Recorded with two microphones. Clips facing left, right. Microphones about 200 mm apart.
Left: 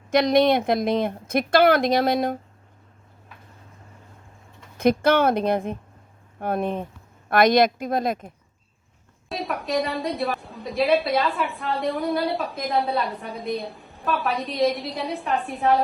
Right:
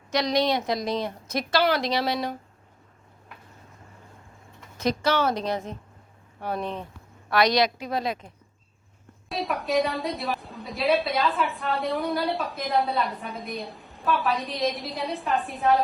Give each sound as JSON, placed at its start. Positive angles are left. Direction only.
{"t": 0.1, "sound": "speech", "side_deg": 55}
{"t": 4.8, "sound": "speech", "side_deg": 55}
{"t": 9.3, "sound": "a woman's voice", "side_deg": 0}